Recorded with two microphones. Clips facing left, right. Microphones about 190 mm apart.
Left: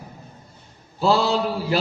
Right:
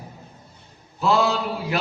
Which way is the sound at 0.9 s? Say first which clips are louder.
Left 1 dB; 30° left (ahead or behind).